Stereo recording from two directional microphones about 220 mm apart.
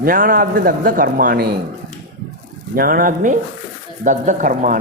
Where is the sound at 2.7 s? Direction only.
40° right (ahead or behind).